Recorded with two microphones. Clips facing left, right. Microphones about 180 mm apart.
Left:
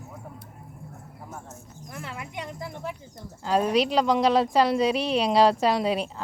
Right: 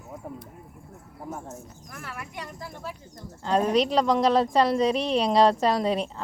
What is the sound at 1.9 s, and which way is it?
Speech, 20° left (ahead or behind).